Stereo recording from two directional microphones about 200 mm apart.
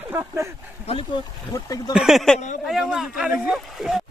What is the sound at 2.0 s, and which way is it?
Speech, centre (ahead or behind).